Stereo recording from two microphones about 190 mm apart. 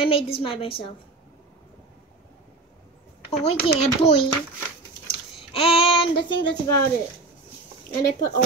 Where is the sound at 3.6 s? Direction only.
35° left (ahead or behind).